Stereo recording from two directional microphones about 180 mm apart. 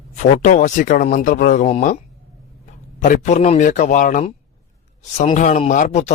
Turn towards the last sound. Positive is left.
turn(degrees=40)  # may be behind; listen again after turning